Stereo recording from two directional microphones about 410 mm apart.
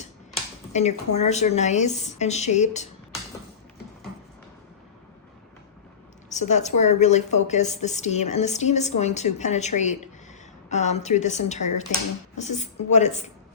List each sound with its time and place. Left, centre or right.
0.7 s a woman's voice: centre
6.3 s a woman's voice: centre